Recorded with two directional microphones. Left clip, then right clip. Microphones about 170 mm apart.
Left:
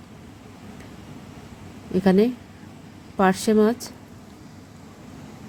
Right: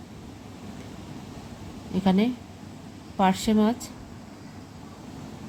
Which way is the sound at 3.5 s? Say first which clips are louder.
Left 5 dB; 15° left (ahead or behind).